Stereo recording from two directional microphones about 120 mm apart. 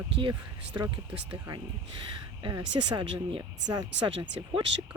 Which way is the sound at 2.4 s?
40° right (ahead or behind).